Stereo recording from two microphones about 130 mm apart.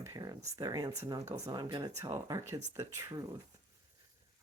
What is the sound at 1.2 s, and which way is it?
Speech, 55° right (ahead or behind).